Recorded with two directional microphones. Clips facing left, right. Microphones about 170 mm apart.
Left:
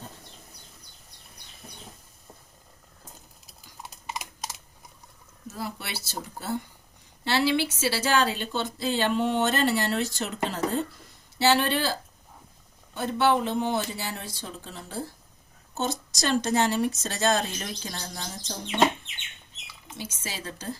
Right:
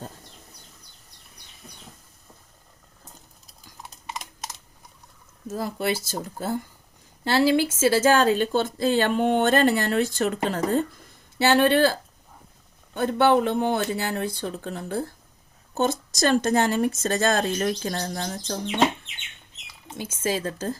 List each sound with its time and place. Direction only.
5.5 s speech: 45° right (ahead or behind)
12.9 s speech: 55° right (ahead or behind)
19.9 s speech: 50° right (ahead or behind)